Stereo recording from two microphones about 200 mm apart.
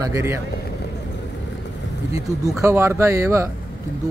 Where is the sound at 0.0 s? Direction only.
15° right (ahead or behind).